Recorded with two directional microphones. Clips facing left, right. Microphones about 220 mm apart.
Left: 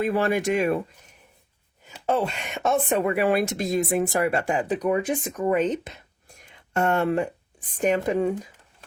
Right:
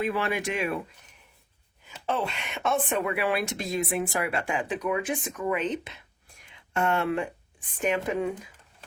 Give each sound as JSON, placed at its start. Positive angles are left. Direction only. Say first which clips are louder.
{"t": 0.0, "sound": "speech", "louder": "left 5 dB", "side_deg": 45}
{"t": 2.0, "sound": "speech", "louder": "left 5 dB", "side_deg": 45}